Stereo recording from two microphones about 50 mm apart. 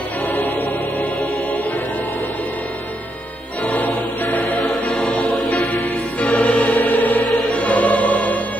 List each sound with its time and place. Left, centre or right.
3.6 s music: left
4.9 s choir: centre
5.2 s music: left